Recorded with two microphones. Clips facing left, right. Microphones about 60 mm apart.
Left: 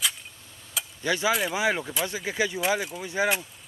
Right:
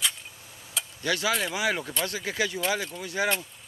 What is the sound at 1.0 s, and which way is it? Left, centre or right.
Speech, centre.